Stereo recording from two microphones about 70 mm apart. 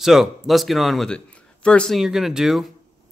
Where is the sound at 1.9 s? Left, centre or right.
Centre.